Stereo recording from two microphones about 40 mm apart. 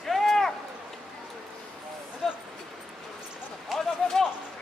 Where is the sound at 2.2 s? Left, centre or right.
Centre.